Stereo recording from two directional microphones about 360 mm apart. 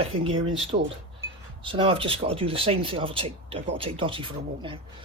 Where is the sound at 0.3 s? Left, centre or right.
Right.